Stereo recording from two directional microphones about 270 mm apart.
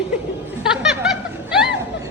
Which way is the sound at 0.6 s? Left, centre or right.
Centre.